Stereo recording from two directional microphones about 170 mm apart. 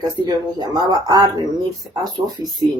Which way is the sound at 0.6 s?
25° right (ahead or behind).